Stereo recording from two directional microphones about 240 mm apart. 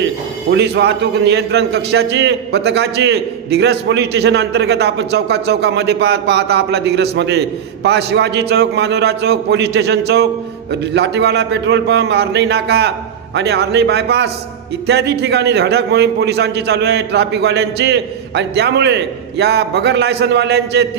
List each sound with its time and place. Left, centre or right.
0.5 s a man's voice: right